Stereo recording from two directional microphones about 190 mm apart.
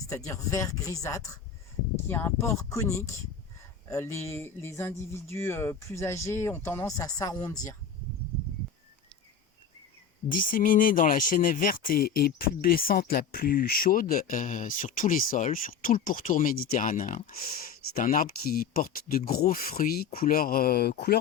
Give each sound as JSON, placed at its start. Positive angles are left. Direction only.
{"t": 0.1, "sound": "speech", "side_deg": 15}
{"t": 10.5, "sound": "speech", "side_deg": 45}